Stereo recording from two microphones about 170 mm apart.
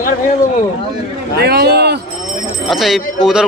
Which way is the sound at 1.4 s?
70° right (ahead or behind).